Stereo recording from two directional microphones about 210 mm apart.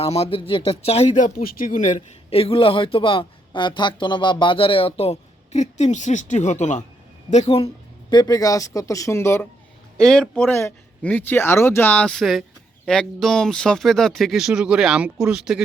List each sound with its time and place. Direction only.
0.0 s speech: 30° left (ahead or behind)
8.1 s speech: 20° left (ahead or behind); by 15.6 s 5° right (ahead or behind)